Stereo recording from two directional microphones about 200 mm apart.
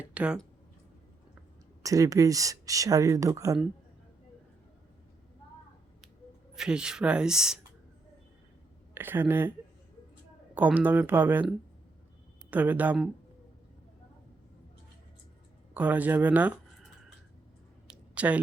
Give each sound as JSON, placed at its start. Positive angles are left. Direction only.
{"t": 0.0, "sound": "speech", "side_deg": -5}
{"t": 1.8, "sound": "speech", "side_deg": -15}
{"t": 6.5, "sound": "speech", "side_deg": -5}
{"t": 9.0, "sound": "speech", "side_deg": -10}
{"t": 10.5, "sound": "speech", "side_deg": -10}
{"t": 15.7, "sound": "speech", "side_deg": -10}
{"t": 17.8, "sound": "a sound", "side_deg": -5}